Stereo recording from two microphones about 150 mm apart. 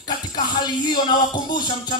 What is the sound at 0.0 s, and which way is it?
Music, 30° left (ahead or behind).